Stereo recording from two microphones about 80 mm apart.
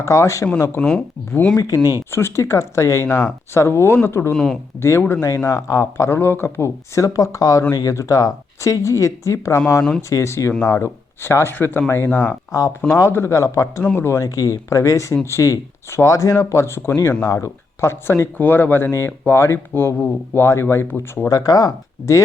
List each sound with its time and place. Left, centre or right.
0.0 s speech: left
0.8 s speech: centre
1.5 s speech: left
1.8 s speech: right
2.0 s speech: left
7.7 s speech: left
7.9 s speech: left
13.8 s speech: left
14.3 s speech: left
18.9 s speech: left
21.2 s speech: left